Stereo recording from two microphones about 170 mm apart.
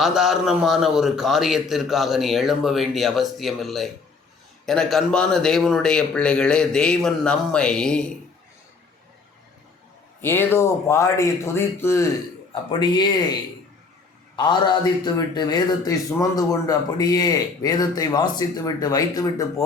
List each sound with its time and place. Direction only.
0.0 s a man's voice: centre (ahead or behind)
10.2 s speech: 10° left (ahead or behind)
12.8 s speech: 25° left (ahead or behind)